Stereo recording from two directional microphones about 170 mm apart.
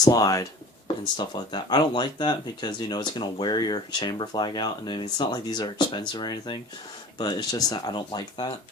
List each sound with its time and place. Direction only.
0.0 s speech: 20° left (ahead or behind)